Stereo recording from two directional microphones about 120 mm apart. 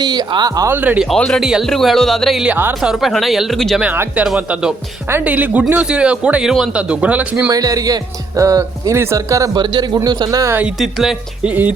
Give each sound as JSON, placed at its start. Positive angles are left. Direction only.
{"t": 0.0, "sound": "speech", "side_deg": -35}
{"t": 0.7, "sound": "speech", "side_deg": -15}
{"t": 1.0, "sound": "speech", "side_deg": 5}
{"t": 2.5, "sound": "speech", "side_deg": -15}
{"t": 2.8, "sound": "speech", "side_deg": 0}
{"t": 3.8, "sound": "speech", "side_deg": -15}
{"t": 7.5, "sound": "speech", "side_deg": -30}
{"t": 9.6, "sound": "speech", "side_deg": -35}
{"t": 10.8, "sound": "speech", "side_deg": 0}